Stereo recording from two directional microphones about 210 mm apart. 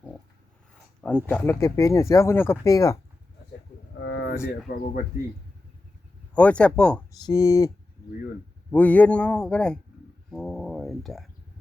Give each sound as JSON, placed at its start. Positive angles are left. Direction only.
{"t": 0.7, "sound": "speech", "side_deg": 5}
{"t": 3.9, "sound": "vehicle", "side_deg": 55}
{"t": 5.1, "sound": "speech", "side_deg": 45}
{"t": 6.3, "sound": "speech", "side_deg": 5}
{"t": 7.3, "sound": "speech", "side_deg": 15}
{"t": 8.7, "sound": "speech", "side_deg": 5}
{"t": 10.3, "sound": "a sound", "side_deg": 5}